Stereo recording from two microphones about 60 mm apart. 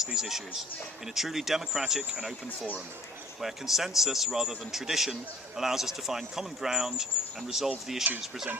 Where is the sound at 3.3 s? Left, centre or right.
Centre.